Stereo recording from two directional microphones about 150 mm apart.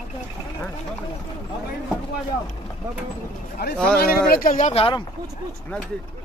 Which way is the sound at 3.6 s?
90° left.